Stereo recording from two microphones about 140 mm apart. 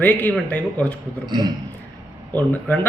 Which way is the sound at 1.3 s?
30° right (ahead or behind).